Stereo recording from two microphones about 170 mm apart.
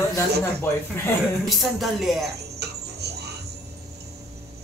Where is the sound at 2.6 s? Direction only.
75° right (ahead or behind).